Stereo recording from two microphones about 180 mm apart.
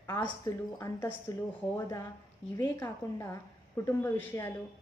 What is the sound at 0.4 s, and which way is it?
Speech, 15° left (ahead or behind).